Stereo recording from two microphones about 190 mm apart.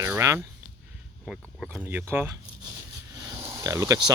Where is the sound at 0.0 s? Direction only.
15° right (ahead or behind).